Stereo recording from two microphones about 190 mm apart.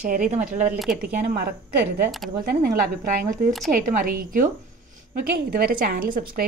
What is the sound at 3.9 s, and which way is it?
Speech, 45° right (ahead or behind).